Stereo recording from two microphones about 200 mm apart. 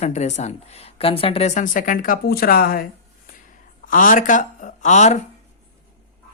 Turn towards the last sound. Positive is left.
turn(degrees=35)  # may be behind; listen again after turning